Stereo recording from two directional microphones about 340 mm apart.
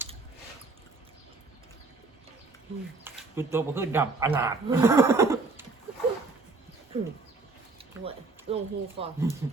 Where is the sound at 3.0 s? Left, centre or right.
Centre.